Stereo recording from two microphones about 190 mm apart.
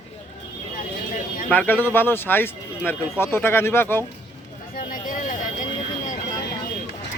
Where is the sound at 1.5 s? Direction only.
10° left (ahead or behind).